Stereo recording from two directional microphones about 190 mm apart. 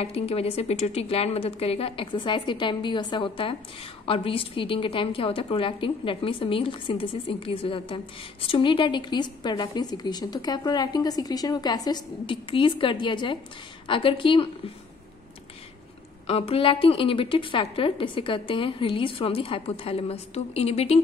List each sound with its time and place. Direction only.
0.0 s a woman's voice: 30° left (ahead or behind)
16.3 s a woman's voice: 30° left (ahead or behind)